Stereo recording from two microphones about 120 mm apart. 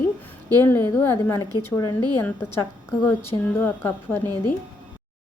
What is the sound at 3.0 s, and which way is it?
A woman's voice, 20° left (ahead or behind).